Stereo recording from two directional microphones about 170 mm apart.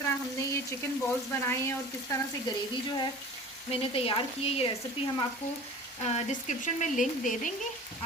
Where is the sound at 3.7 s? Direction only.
35° left (ahead or behind).